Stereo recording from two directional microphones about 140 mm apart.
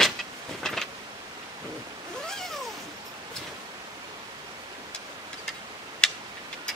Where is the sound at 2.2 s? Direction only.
5° left (ahead or behind).